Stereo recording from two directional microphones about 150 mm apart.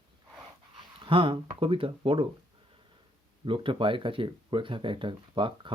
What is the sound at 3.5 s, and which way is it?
Speech, 35° right (ahead or behind).